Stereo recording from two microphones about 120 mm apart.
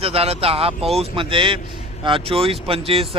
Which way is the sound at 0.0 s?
55° right (ahead or behind).